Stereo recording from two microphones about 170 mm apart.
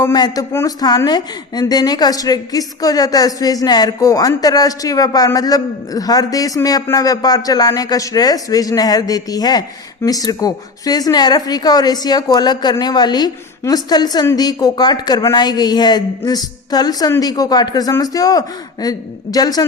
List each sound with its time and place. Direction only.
0.0 s speech: 20° left (ahead or behind)